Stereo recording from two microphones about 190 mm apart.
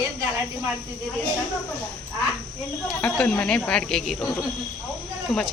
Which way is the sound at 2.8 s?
5° left (ahead or behind).